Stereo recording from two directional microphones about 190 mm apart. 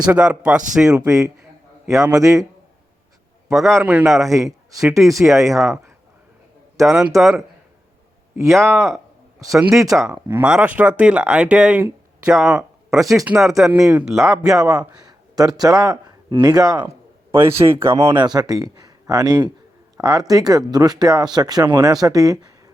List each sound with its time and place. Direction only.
0.1 s speech: 5° right (ahead or behind)
1.0 s speech: 15° right (ahead or behind)
3.5 s speech: centre (ahead or behind)
4.2 s speech: 15° right (ahead or behind)
4.4 s speech: centre (ahead or behind)
8.4 s speech: centre (ahead or behind)
14.8 s speech: 20° right (ahead or behind)
18.1 s speech: 20° right (ahead or behind)